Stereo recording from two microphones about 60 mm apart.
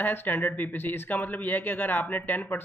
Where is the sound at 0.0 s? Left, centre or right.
Left.